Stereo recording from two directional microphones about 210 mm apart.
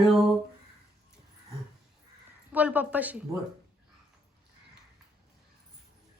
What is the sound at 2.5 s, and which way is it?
Speech, 5° right (ahead or behind).